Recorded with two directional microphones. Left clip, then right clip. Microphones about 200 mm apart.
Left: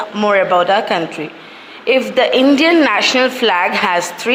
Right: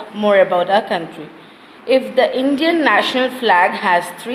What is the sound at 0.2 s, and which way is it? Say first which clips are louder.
A woman's voice: left 1 dB; 10° left (ahead or behind).